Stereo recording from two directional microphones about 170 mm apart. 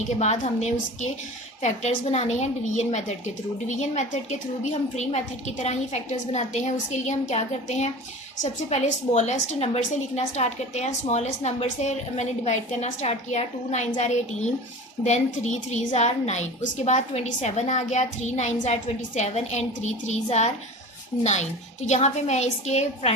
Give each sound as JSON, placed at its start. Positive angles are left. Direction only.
{"t": 0.2, "sound": "a woman's voice", "side_deg": 45}
{"t": 21.8, "sound": "a woman's voice", "side_deg": 45}